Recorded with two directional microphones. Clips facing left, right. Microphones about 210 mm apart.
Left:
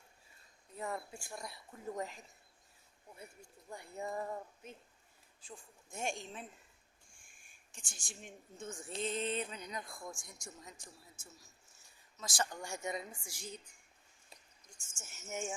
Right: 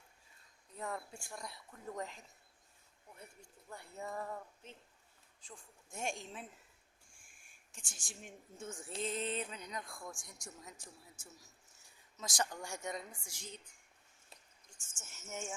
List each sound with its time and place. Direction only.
0.8 s speech: 5° left (ahead or behind)
3.7 s speech: 15° left (ahead or behind)
5.4 s a woman's voice: 5° left (ahead or behind)
7.7 s speech: 5° right (ahead or behind)
12.2 s speech: 20° right (ahead or behind)
12.5 s speech: centre (ahead or behind)
14.9 s speech: 15° left (ahead or behind)